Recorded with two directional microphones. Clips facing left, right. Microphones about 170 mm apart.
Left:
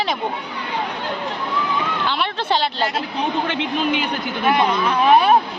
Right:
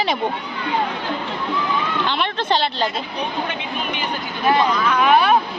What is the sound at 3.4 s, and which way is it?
Speech, 75° left (ahead or behind).